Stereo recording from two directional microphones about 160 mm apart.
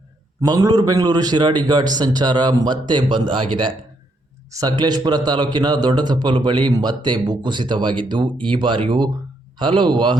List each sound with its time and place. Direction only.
0.4 s a man's voice: 25° right (ahead or behind)